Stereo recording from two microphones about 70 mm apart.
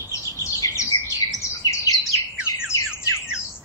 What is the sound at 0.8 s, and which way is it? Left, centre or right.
Bird, left.